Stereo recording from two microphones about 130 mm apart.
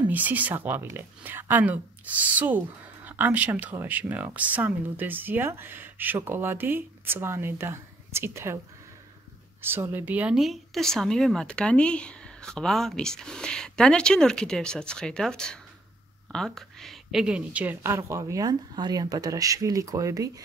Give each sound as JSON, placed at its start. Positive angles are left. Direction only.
{"t": 0.1, "sound": "speech", "side_deg": -10}
{"t": 9.6, "sound": "a woman's voice", "side_deg": -20}